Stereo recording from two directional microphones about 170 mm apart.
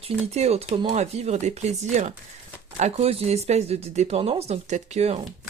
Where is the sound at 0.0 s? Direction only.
40° right (ahead or behind).